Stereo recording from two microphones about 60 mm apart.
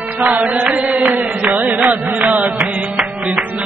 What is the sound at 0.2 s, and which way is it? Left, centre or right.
Music, right.